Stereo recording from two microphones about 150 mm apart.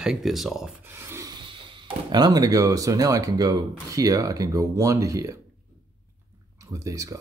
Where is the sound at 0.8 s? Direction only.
15° right (ahead or behind); by 1.7 s 35° right (ahead or behind).